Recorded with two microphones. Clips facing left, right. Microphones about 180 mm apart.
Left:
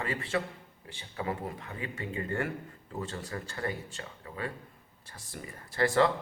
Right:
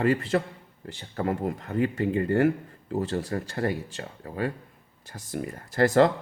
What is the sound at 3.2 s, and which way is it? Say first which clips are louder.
Speech: right 8 dB; 40° right (ahead or behind).